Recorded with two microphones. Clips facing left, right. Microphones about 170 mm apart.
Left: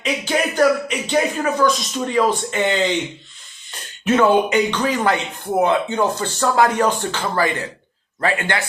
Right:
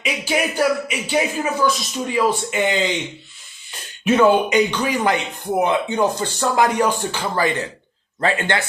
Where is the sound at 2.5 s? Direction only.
10° right (ahead or behind).